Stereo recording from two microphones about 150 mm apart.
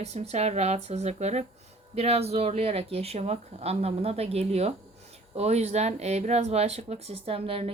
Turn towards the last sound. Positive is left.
turn(degrees=-40)  # may be behind; listen again after turning